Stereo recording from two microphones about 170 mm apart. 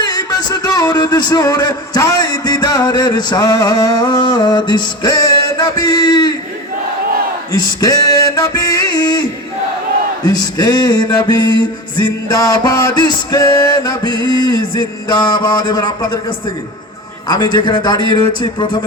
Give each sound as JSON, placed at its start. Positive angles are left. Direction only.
{"t": 0.0, "sound": "speech", "side_deg": 25}
{"t": 5.5, "sound": "music", "side_deg": 25}
{"t": 7.5, "sound": "music", "side_deg": 20}
{"t": 10.2, "sound": "music", "side_deg": 25}
{"t": 17.2, "sound": "music", "side_deg": 25}